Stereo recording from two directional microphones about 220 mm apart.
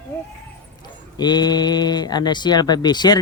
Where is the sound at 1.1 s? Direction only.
20° left (ahead or behind).